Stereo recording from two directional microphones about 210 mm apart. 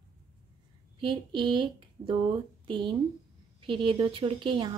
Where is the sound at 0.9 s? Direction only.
25° right (ahead or behind).